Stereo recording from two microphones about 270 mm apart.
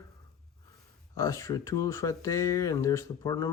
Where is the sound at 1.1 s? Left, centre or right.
Centre.